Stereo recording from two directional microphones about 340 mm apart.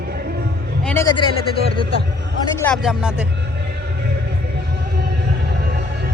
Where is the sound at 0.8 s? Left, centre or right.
Centre.